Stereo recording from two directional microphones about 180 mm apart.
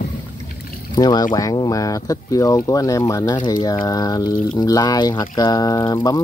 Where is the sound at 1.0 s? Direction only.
25° left (ahead or behind).